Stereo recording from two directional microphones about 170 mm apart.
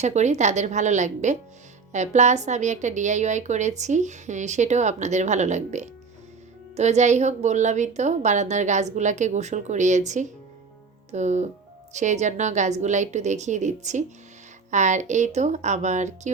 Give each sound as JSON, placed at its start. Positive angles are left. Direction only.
{"t": 0.0, "sound": "a woman's voice", "side_deg": -40}